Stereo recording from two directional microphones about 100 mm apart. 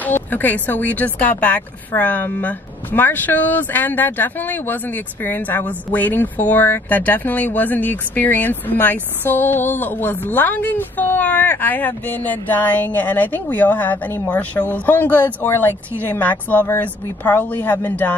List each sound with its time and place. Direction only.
0.0 s speech: 20° left (ahead or behind)